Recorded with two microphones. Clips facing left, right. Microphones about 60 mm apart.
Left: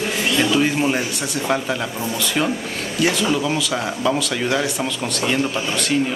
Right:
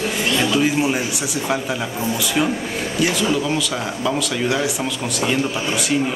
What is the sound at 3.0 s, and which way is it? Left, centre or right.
A man's voice, centre.